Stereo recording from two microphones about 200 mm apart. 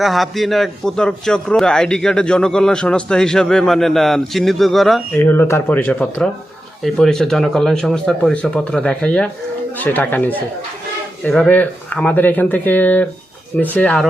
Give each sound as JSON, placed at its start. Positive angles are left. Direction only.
{"t": 0.0, "sound": "a man's voice", "side_deg": 0}
{"t": 5.2, "sound": "a man's voice", "side_deg": 10}